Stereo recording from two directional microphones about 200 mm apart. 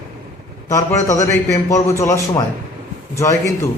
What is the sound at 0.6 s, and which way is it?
A man's voice, 15° left (ahead or behind).